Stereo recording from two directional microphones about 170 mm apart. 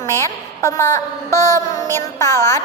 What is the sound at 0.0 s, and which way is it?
A woman's voice, 15° left (ahead or behind).